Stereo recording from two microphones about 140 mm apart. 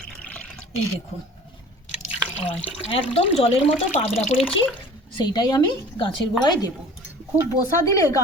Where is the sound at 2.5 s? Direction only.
40° left (ahead or behind).